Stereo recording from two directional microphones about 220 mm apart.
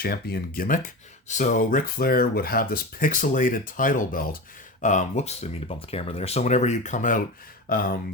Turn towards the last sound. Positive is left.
turn(degrees=40)  # may be behind; listen again after turning